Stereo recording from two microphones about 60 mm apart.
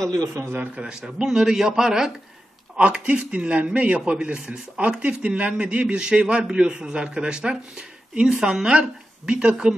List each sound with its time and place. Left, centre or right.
0.1 s a man's voice: right
1.0 s a man's voice: centre
2.8 s a man's voice: centre